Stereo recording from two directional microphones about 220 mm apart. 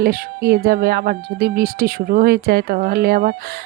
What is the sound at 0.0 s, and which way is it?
Speech, 40° right (ahead or behind).